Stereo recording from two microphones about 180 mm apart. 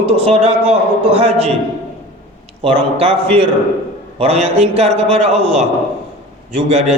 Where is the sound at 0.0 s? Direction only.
35° right (ahead or behind).